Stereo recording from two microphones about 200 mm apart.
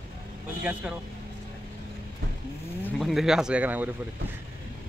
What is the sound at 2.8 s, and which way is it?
Speech, centre (ahead or behind).